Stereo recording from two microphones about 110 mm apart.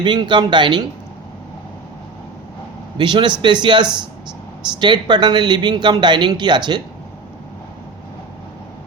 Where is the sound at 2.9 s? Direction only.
45° right (ahead or behind).